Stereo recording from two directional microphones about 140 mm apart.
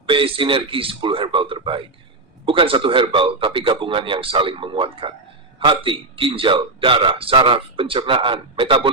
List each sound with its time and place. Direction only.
0.0 s a man's voice: 40° right (ahead or behind)